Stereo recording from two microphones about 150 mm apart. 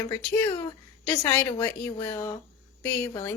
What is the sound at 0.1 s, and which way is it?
A woman's voice, 15° left (ahead or behind).